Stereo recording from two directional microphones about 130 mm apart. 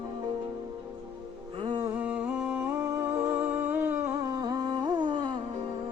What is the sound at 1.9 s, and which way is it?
Music, 10° right (ahead or behind).